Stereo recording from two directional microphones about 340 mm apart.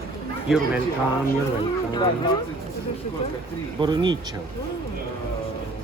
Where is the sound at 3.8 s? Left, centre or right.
Centre.